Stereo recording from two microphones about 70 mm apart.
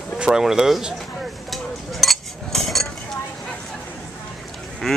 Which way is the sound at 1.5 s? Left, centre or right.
Centre.